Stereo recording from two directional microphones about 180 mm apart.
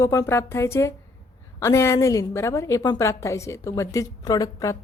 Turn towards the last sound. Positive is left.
turn(degrees=20)  # may be behind; listen again after turning